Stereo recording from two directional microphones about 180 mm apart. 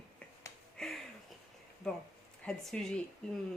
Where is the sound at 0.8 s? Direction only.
5° left (ahead or behind).